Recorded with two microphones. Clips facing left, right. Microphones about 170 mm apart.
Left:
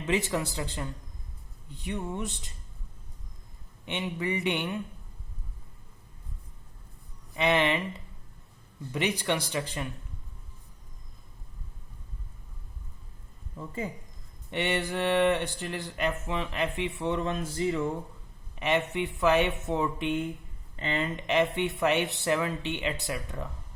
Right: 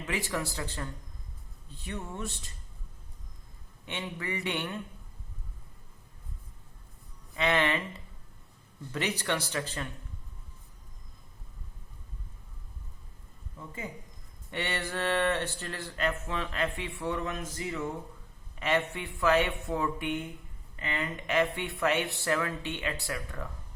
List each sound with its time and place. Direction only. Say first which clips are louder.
0.0 s speech: left 5 dB; 25° left (ahead or behind)
3.8 s speech: left 5 dB; 20° left (ahead or behind)
7.3 s speech: left 2 dB; 20° left (ahead or behind)
14.5 s speech: left 5 dB; 20° left (ahead or behind)
18.5 s speech: left 2 dB; 20° left (ahead or behind)